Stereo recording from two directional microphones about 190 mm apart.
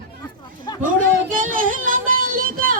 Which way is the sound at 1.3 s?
45° right (ahead or behind).